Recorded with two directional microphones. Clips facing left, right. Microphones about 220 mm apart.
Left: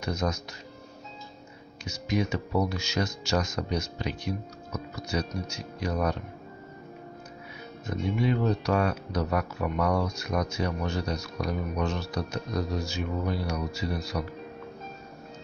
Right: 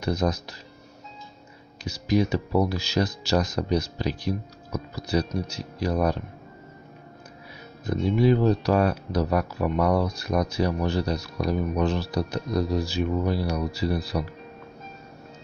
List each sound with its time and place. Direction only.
0.0 s speech: 35° right (ahead or behind)
1.9 s speech: 35° right (ahead or behind)
7.8 s speech: 35° right (ahead or behind)